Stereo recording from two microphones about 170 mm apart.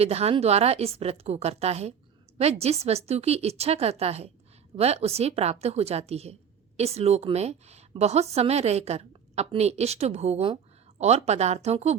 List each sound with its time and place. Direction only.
0.0 s a woman's voice: 40° right (ahead or behind)